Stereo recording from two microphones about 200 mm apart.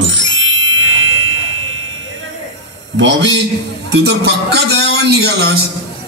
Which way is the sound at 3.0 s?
65° right (ahead or behind).